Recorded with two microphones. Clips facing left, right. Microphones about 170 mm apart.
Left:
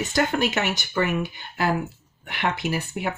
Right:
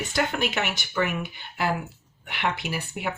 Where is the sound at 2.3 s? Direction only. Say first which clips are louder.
Left 3 dB; 45° left (ahead or behind).